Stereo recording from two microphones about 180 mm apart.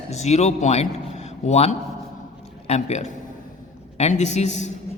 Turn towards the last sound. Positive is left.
turn(degrees=40)  # may be behind; listen again after turning